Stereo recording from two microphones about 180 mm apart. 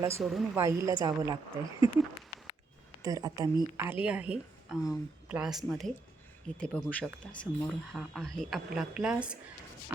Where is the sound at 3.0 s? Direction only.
20° right (ahead or behind).